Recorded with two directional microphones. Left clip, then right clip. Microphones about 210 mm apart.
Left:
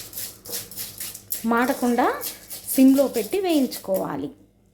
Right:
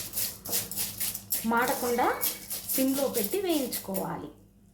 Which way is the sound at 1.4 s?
50° left (ahead or behind).